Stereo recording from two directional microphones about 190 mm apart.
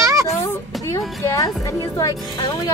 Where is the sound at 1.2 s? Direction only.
15° left (ahead or behind).